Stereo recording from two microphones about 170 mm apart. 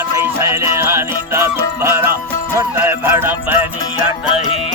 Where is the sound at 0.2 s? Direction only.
15° right (ahead or behind).